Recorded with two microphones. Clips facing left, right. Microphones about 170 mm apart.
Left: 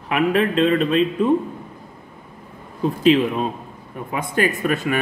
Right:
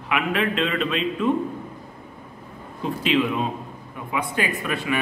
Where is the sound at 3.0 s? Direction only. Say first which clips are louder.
Left 5 dB; 40° left (ahead or behind).